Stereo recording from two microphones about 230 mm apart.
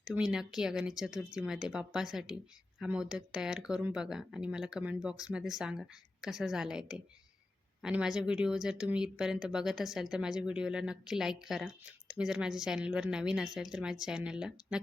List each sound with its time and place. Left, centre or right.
0.0 s speech: centre